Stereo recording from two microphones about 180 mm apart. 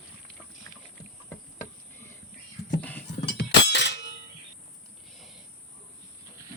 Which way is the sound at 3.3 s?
70° left (ahead or behind).